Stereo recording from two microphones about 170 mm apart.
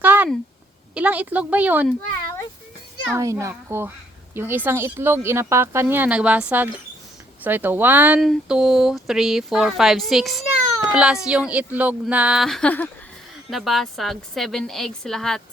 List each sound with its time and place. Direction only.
0.0 s a sound: 10° right (ahead or behind)
0.9 s speech: 10° right (ahead or behind)
3.2 s speech: 15° right (ahead or behind); by 15.4 s centre (ahead or behind)